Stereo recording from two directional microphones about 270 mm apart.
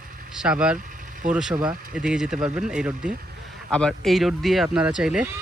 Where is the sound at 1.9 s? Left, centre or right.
Centre.